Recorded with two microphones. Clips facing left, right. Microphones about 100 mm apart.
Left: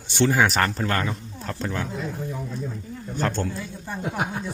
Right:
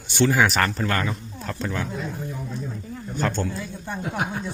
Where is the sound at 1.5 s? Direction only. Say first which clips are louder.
Even; 30° left (ahead or behind).